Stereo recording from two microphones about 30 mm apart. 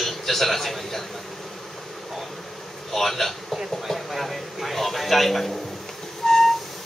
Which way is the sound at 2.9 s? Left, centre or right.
Centre.